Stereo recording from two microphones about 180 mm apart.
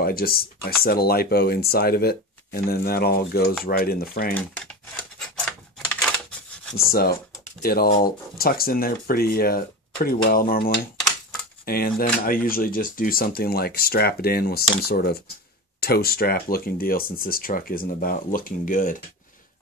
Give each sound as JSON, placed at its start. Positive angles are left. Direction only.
{"t": 0.0, "sound": "speech", "side_deg": 55}
{"t": 4.3, "sound": "speech", "side_deg": 5}
{"t": 5.2, "sound": "a sound", "side_deg": 5}
{"t": 6.8, "sound": "speech", "side_deg": 55}